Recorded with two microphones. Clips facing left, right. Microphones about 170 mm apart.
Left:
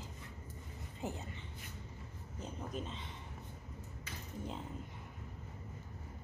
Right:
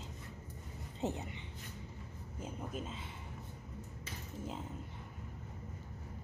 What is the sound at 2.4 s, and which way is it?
Speech, 5° right (ahead or behind).